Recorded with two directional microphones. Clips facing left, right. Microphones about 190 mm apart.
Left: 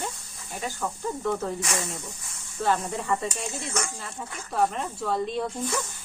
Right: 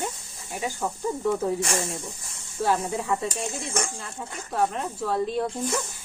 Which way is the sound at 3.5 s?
30° right (ahead or behind).